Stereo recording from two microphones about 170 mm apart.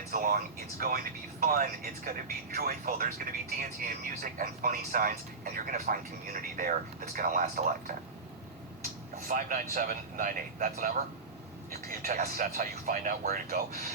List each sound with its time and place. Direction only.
0.1 s speech: 55° right (ahead or behind)
9.2 s speech: 55° right (ahead or behind)